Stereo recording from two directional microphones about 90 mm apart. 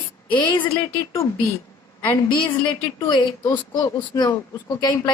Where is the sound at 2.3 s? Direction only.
60° left (ahead or behind).